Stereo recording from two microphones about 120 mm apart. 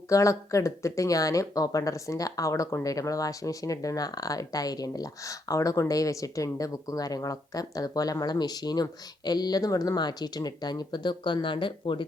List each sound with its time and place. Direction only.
0.1 s speech: 25° left (ahead or behind); by 12.0 s 45° left (ahead or behind)